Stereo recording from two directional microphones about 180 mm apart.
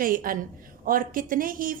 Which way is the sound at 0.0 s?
50° right (ahead or behind).